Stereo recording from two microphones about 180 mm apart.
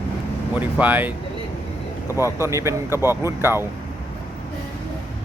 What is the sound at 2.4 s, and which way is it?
A man's voice, 15° right (ahead or behind).